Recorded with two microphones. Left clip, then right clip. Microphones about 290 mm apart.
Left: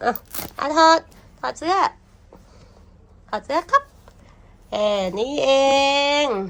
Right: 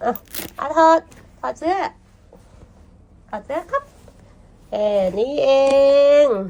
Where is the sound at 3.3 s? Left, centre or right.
Centre.